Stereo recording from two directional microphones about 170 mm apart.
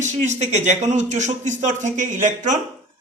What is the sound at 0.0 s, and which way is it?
Speech, 45° right (ahead or behind).